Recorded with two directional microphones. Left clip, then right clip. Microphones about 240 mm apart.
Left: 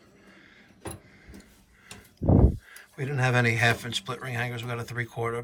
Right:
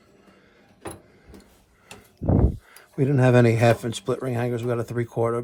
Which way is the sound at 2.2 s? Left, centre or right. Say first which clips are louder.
Even; centre.